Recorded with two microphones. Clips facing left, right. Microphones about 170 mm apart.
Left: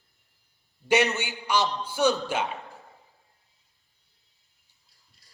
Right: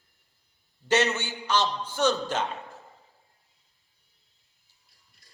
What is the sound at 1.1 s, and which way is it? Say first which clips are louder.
A man's voice: left 1 dB; 15° left (ahead or behind).